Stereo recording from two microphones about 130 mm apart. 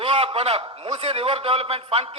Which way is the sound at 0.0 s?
50° right (ahead or behind).